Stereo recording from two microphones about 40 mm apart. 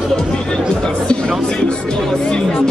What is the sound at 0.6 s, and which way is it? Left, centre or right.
Chatter, centre.